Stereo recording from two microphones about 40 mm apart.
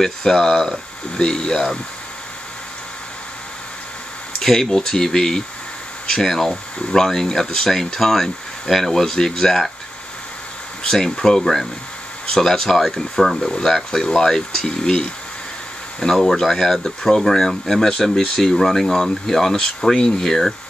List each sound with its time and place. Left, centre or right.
0.0 s speech: centre
4.4 s speech: centre
10.8 s speech: centre
13.4 s speech: left
13.7 s speech: centre